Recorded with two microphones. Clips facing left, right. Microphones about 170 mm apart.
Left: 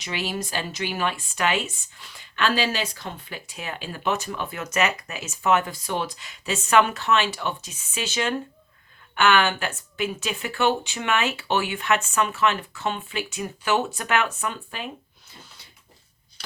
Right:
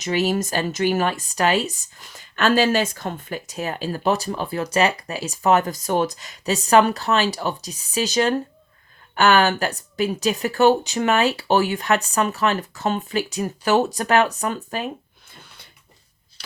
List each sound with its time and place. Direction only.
0.0 s speech: 45° right (ahead or behind)